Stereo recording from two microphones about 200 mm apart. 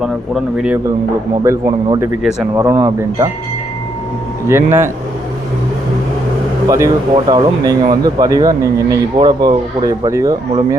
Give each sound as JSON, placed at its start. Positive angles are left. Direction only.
{"t": 0.0, "sound": "speech", "side_deg": -5}
{"t": 1.5, "sound": "speech", "side_deg": -15}
{"t": 4.4, "sound": "speech", "side_deg": -10}
{"t": 6.7, "sound": "speech", "side_deg": -15}